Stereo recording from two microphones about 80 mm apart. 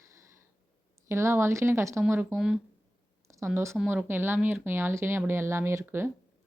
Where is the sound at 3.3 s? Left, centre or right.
Right.